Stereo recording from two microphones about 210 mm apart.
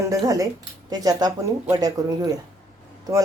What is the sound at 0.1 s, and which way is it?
Speech, 15° right (ahead or behind).